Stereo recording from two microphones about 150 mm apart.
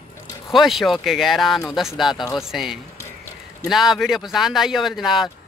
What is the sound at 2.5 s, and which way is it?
Speech, centre (ahead or behind).